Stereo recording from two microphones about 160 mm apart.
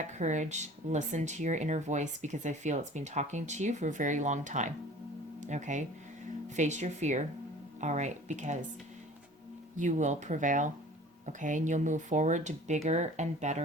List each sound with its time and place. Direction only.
0.0 s speech: 45° right (ahead or behind)
9.7 s speech: 50° right (ahead or behind)